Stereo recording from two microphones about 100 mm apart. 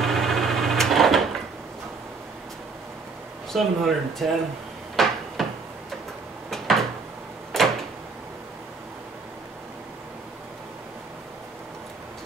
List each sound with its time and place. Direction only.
0.0 s sewing machine: centre (ahead or behind)
3.5 s speech: centre (ahead or behind)
5.0 s cupboard open or close: centre (ahead or behind)
5.4 s a sound: centre (ahead or behind)
6.5 s drawer open or close: 5° left (ahead or behind)
7.5 s door: 5° left (ahead or behind)